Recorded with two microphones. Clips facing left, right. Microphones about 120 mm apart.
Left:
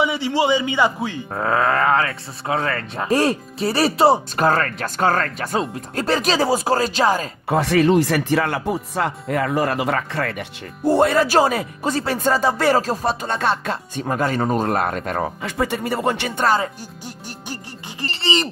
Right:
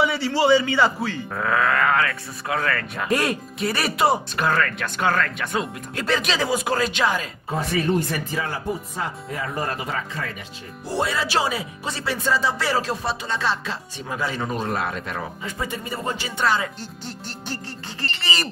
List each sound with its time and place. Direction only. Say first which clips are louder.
0.0 s a man's voice: left 1 dB; 15° left (ahead or behind)
1.3 s speech: left 3 dB; 30° left (ahead or behind)
7.4 s speech: left 8 dB; 75° left (ahead or behind)
10.8 s speech: left 9 dB; 50° left (ahead or behind)
15.4 s speech: left 7 dB; 75° left (ahead or behind)
16.3 s speech: left 1 dB; 40° left (ahead or behind)
18.2 s speech: left 7 dB; 25° left (ahead or behind)